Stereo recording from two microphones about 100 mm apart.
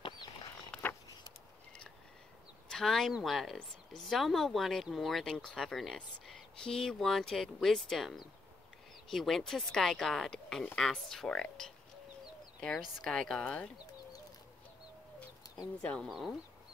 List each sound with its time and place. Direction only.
0.0 s a sound: 55° left (ahead or behind)
2.7 s speech: 5° left (ahead or behind)
15.8 s speech: 10° left (ahead or behind)
16.1 s speech: 5° right (ahead or behind)